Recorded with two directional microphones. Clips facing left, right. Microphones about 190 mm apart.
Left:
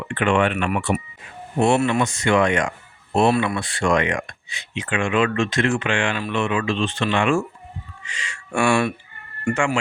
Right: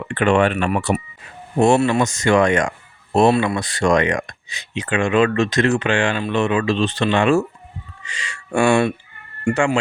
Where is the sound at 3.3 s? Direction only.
25° right (ahead or behind).